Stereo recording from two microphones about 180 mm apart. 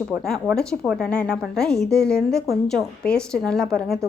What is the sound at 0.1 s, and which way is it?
A woman's voice, centre (ahead or behind).